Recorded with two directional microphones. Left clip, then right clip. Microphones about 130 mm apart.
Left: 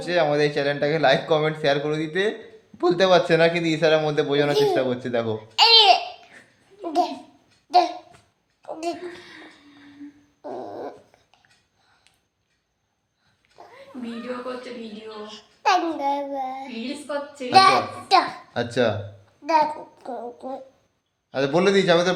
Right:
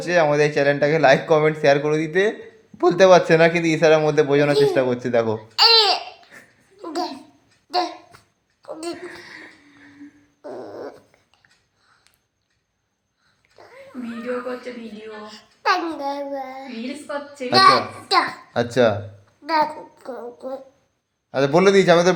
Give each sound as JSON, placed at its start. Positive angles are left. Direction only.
{"t": 0.0, "sound": "a man's voice", "side_deg": -50}
{"t": 5.5, "sound": "laughter", "side_deg": 25}
{"t": 6.8, "sound": "a sound", "side_deg": 25}
{"t": 10.4, "sound": "dog", "side_deg": 25}
{"t": 13.6, "sound": "a sound", "side_deg": 20}
{"t": 15.0, "sound": "child singing", "side_deg": 25}
{"t": 18.5, "sound": "a man's voice", "side_deg": -55}
{"t": 19.5, "sound": "babbling", "side_deg": 20}
{"t": 21.3, "sound": "a man's voice", "side_deg": -55}